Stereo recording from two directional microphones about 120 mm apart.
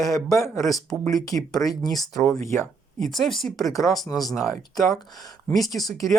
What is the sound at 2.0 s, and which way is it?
Speech, centre (ahead or behind).